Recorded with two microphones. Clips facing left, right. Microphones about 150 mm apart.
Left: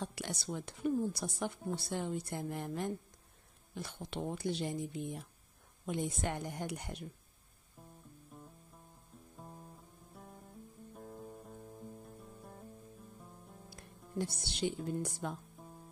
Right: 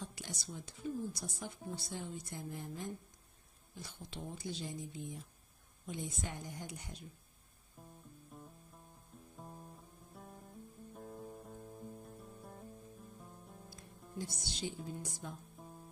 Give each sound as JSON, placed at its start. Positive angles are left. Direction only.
{"t": 0.0, "sound": "speech", "side_deg": 65}
{"t": 9.4, "sound": "guitar", "side_deg": 0}
{"t": 11.0, "sound": "music", "side_deg": 0}
{"t": 14.1, "sound": "speech", "side_deg": 65}